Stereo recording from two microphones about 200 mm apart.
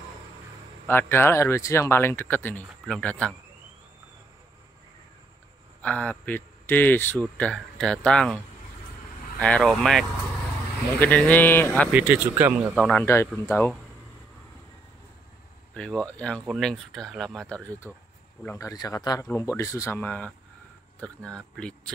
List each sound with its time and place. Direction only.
0.8 s speech: 10° left (ahead or behind)
5.8 s speech: 5° left (ahead or behind)
9.4 s speech: 5° left (ahead or behind)
11.9 s speech: 5° right (ahead or behind)
12.7 s speech: 5° left (ahead or behind)
13.0 s speech: 15° left (ahead or behind)
15.7 s speech: 5° left (ahead or behind)